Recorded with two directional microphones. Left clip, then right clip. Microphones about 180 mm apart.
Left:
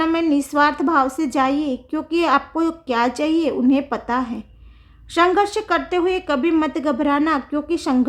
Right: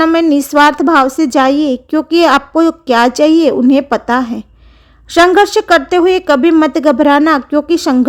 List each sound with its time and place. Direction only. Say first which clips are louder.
0.0 s a woman's voice: right 9 dB; 35° right (ahead or behind)